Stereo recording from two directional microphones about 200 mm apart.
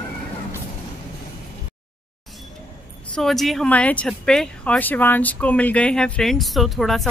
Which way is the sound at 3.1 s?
Centre (ahead or behind).